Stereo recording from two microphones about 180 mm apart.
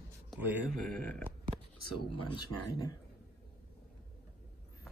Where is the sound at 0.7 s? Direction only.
5° left (ahead or behind).